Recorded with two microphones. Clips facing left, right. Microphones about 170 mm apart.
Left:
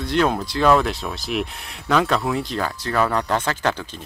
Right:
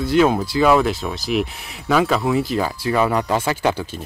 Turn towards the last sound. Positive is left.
turn(degrees=-10)  # may be behind; listen again after turning